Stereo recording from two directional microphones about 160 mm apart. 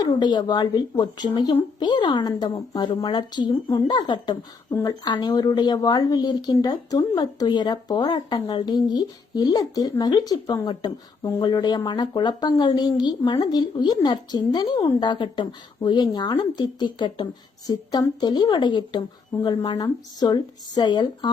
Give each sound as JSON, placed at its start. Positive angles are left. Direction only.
{"t": 0.0, "sound": "a woman's voice", "side_deg": 25}